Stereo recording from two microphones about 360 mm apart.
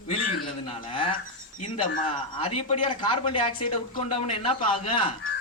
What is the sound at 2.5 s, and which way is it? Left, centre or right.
Speech, left.